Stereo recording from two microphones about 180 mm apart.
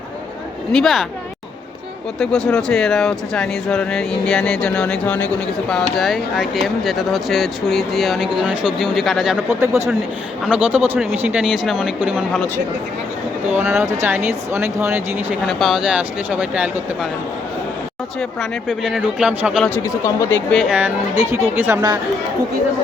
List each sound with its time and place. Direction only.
0.7 s speech: centre (ahead or behind)
2.1 s speech: 5° left (ahead or behind)
9.6 s speech: 15° right (ahead or behind)
13.5 s speech: 10° right (ahead or behind)
15.4 s speech: centre (ahead or behind)
18.2 s speech: centre (ahead or behind)
19.6 s speech: 15° left (ahead or behind)
20.5 s speech: 5° left (ahead or behind)
21.5 s speech: 10° right (ahead or behind)